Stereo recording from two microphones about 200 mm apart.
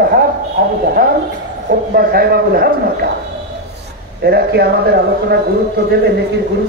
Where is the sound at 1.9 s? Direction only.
50° right (ahead or behind).